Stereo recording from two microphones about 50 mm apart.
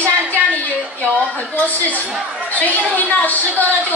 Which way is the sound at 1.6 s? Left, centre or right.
Left.